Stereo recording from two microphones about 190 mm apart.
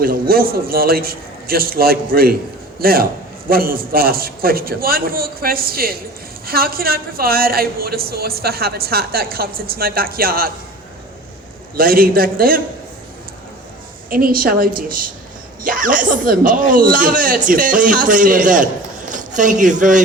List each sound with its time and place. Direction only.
0.0 s speech: 50° right (ahead or behind)
11.8 s speech: 50° right (ahead or behind)
14.1 s speech: 50° right (ahead or behind)